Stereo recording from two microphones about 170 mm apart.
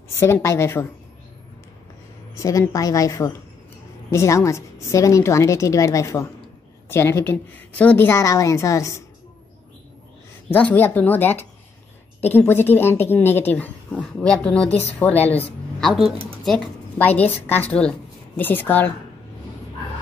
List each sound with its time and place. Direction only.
0.2 s a woman's voice: 15° left (ahead or behind)
2.3 s a woman's voice: 20° left (ahead or behind)
10.5 s a woman's voice: 10° left (ahead or behind)
15.8 s a woman's voice: centre (ahead or behind)